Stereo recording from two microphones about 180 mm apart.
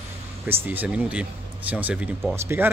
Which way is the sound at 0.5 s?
10° right (ahead or behind).